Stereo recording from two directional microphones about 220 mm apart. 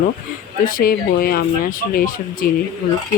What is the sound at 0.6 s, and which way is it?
Speech, 40° left (ahead or behind).